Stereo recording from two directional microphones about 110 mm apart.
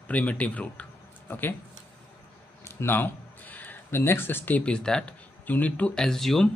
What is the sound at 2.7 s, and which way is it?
A man's voice, 20° left (ahead or behind).